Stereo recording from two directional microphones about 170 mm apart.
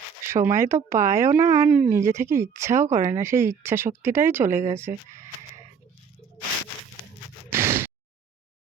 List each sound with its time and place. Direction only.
0.3 s speech: 15° right (ahead or behind)
7.5 s gasp: 15° right (ahead or behind)